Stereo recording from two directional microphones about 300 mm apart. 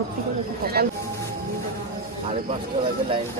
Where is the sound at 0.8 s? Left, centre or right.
Right.